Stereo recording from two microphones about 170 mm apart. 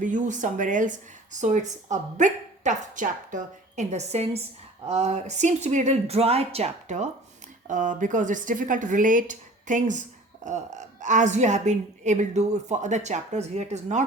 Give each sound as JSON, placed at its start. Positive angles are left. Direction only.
{"t": 0.0, "sound": "speech", "side_deg": -45}